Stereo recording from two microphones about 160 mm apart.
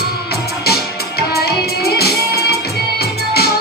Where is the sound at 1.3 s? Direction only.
80° left.